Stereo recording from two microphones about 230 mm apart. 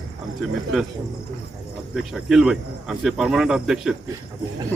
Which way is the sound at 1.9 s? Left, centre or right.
Centre.